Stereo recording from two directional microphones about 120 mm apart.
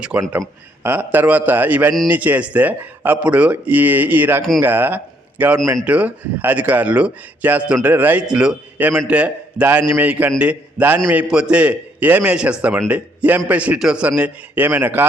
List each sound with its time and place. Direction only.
0.2 s a man's voice: 20° right (ahead or behind)